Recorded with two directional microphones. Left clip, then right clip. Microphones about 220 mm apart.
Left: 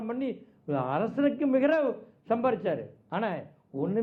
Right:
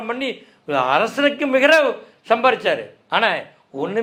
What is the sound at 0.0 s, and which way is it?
A man's voice, 10° right (ahead or behind).